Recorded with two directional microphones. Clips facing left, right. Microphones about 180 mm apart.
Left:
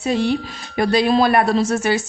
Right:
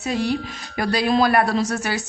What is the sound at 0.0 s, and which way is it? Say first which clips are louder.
A woman's voice: left 4 dB; 25° left (ahead or behind).